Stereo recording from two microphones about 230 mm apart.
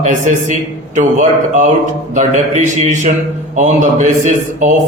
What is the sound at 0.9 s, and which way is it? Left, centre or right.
Mantra, right.